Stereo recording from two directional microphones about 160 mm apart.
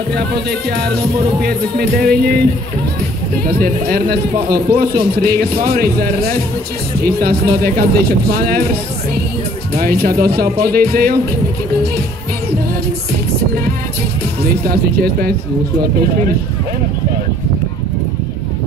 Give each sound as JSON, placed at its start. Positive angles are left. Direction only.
{"t": 0.5, "sound": "a man's voice", "side_deg": -75}
{"t": 3.4, "sound": "a man's voice", "side_deg": -75}
{"t": 9.8, "sound": "a man's voice", "side_deg": -75}
{"t": 14.4, "sound": "a man's voice", "side_deg": -75}